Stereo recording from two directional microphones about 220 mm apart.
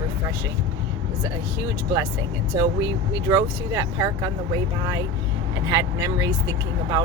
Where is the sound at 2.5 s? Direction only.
15° right (ahead or behind).